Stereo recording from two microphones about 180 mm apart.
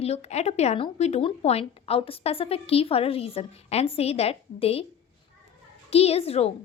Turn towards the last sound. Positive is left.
turn(degrees=35)  # may be behind; listen again after turning